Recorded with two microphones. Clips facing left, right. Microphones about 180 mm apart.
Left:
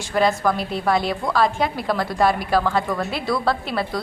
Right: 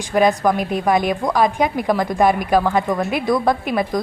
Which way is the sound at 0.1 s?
15° right (ahead or behind).